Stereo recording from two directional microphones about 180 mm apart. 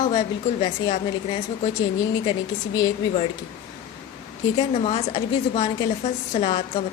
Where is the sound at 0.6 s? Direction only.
30° left (ahead or behind).